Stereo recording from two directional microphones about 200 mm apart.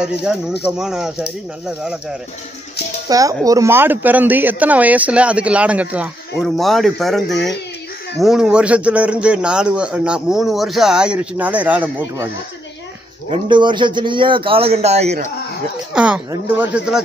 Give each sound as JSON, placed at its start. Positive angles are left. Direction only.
{"t": 0.0, "sound": "a man's voice", "side_deg": -5}
{"t": 3.1, "sound": "a man's voice", "side_deg": -15}
{"t": 13.3, "sound": "a man's voice", "side_deg": -25}
{"t": 15.9, "sound": "a man's voice", "side_deg": -5}